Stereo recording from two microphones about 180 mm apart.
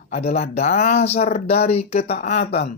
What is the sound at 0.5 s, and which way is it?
Speech, 35° left (ahead or behind).